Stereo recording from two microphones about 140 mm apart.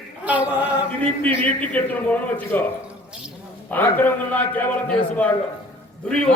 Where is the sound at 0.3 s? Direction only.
10° right (ahead or behind).